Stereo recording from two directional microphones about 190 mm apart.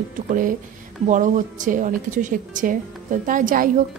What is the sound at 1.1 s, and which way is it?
A woman's voice, 40° right (ahead or behind).